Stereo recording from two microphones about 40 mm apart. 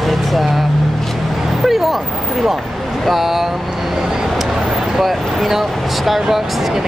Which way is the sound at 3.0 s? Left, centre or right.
Centre.